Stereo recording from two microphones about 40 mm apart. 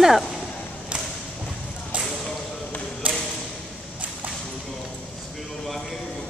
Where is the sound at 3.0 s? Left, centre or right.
Right.